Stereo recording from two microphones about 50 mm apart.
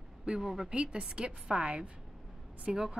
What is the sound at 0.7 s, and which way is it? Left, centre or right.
A woman's voice, centre.